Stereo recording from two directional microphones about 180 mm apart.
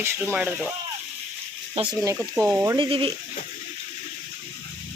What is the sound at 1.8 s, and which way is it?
Speech, 40° right (ahead or behind).